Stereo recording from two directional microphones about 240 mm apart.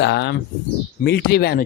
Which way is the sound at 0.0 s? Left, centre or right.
Left.